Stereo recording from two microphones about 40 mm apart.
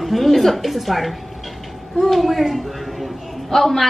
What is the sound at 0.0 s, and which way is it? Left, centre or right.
A woman's voice, centre.